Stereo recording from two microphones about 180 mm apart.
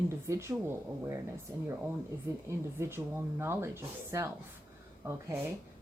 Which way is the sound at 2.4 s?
15° right (ahead or behind).